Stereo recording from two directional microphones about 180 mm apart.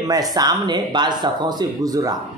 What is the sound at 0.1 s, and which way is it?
Speech, 20° right (ahead or behind).